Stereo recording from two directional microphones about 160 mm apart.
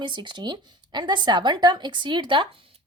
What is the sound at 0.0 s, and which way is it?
A woman's voice, 30° right (ahead or behind).